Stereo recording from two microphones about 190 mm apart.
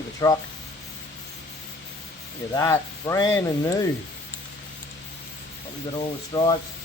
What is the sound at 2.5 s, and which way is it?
Speech, 15° left (ahead or behind).